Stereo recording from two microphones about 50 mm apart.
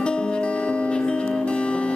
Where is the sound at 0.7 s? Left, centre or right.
Left.